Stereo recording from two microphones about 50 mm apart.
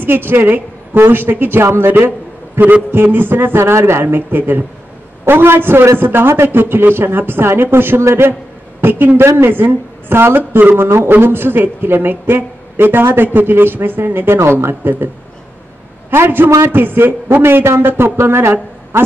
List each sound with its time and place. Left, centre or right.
0.0 s a woman's voice: right
1.9 s a woman's voice: right
9.2 s speech: right
9.5 s a woman's voice: right
16.1 s a woman's voice: right